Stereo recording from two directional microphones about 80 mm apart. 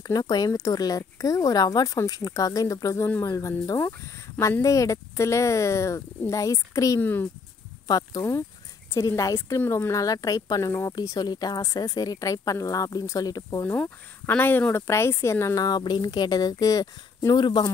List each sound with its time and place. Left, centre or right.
0.0 s a woman's voice: left
7.0 s speech: left
8.2 s speech: left
9.6 s speech: left
10.0 s a woman's voice: left
14.3 s speech: left
15.6 s a woman's voice: left